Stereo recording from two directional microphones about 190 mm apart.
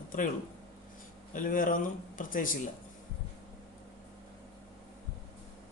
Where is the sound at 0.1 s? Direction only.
45° left (ahead or behind).